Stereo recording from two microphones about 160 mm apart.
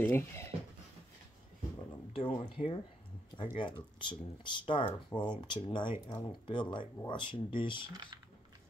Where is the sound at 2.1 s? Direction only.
35° left (ahead or behind).